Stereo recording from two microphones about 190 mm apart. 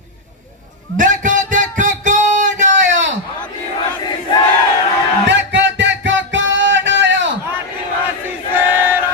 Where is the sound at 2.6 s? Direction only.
75° right (ahead or behind).